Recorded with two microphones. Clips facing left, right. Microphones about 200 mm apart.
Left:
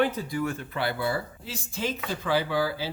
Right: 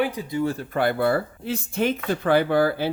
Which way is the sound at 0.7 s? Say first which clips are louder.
Right 9 dB; 50° right (ahead or behind).